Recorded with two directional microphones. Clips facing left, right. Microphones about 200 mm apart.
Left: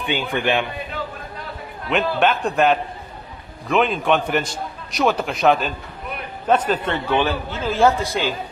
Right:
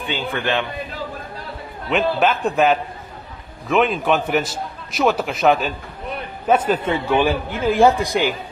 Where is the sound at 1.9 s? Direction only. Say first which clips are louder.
Right 1 dB; centre (ahead or behind); by 8.4 s 15° right (ahead or behind).